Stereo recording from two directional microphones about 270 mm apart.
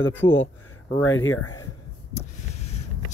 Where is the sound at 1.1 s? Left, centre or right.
Left.